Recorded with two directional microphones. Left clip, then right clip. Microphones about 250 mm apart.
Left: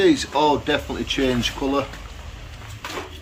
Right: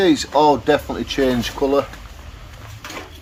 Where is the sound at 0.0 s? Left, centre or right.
Right.